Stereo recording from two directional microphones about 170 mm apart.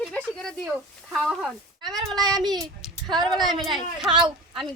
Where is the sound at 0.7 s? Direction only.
5° right (ahead or behind).